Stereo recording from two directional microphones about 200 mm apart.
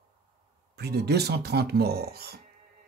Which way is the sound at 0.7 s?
55° right (ahead or behind).